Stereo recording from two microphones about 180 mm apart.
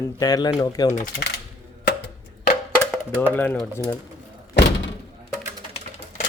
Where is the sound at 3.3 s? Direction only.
10° left (ahead or behind).